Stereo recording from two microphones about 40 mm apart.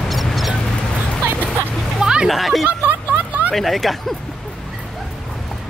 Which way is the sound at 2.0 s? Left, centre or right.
Centre.